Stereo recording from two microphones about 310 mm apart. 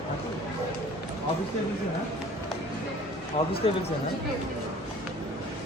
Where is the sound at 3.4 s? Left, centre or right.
Centre.